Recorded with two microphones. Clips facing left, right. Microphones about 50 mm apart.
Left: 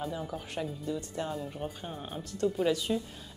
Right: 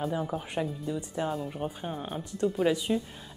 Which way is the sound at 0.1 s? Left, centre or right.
Centre.